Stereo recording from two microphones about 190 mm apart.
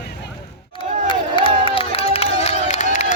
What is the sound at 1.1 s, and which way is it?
Crowd, 25° left (ahead or behind).